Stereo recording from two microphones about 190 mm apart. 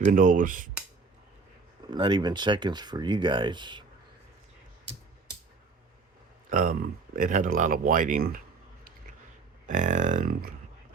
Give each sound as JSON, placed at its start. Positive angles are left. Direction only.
{"t": 0.0, "sound": "speech", "side_deg": -45}
{"t": 1.9, "sound": "speech", "side_deg": -25}
{"t": 6.5, "sound": "speech", "side_deg": -45}
{"t": 9.6, "sound": "speech", "side_deg": -40}